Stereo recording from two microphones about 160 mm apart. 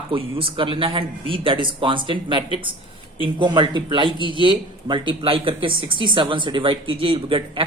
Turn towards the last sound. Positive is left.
turn(degrees=-30)  # may be behind; listen again after turning